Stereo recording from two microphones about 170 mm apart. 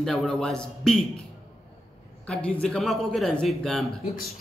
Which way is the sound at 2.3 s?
5° left (ahead or behind).